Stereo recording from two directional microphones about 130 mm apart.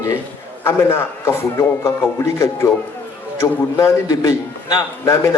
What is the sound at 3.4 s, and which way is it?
A man's voice, 25° left (ahead or behind).